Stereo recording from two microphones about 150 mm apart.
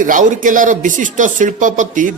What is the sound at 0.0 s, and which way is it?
A man's voice, 60° right (ahead or behind).